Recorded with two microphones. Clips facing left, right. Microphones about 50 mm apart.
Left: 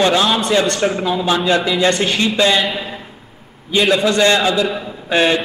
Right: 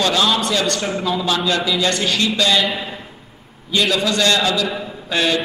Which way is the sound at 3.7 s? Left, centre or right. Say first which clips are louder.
Left 4 dB; left.